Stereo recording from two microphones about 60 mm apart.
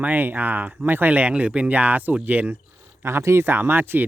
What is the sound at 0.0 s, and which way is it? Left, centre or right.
Speech, right.